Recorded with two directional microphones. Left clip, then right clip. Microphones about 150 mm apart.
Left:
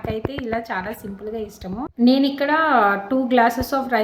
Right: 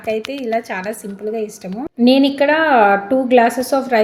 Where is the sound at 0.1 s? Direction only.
15° right (ahead or behind).